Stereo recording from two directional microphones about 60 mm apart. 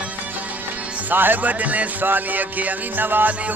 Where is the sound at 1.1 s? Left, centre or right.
Right.